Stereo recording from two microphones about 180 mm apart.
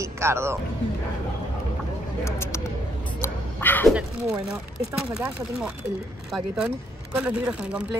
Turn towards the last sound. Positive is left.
turn(degrees=-5)  # may be behind; listen again after turning